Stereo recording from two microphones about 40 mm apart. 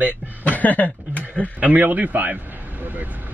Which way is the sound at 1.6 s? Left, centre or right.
Right.